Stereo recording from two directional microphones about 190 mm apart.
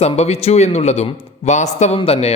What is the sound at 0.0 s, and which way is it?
Speech, 35° left (ahead or behind).